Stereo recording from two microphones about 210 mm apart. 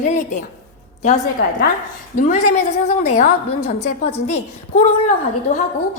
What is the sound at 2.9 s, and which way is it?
A woman's voice, 35° left (ahead or behind).